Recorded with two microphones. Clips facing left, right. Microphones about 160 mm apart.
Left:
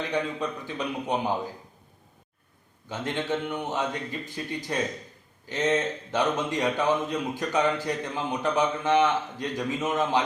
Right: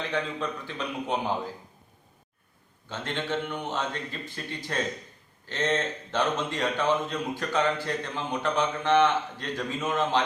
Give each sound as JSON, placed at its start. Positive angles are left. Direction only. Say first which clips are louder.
{"t": 0.1, "sound": "speech", "louder": "left 2 dB", "side_deg": 15}
{"t": 2.9, "sound": "speech", "louder": "left 2 dB", "side_deg": 15}